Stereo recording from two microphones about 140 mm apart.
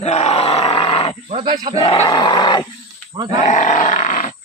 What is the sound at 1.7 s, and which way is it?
Grunt, 40° left (ahead or behind).